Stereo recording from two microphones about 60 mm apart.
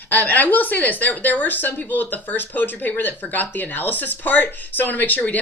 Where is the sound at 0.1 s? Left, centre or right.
Left.